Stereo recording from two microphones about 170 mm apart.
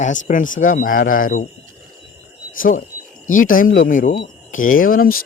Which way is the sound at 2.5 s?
55° left (ahead or behind).